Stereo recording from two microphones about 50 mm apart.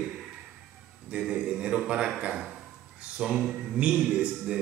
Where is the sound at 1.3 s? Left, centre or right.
Centre.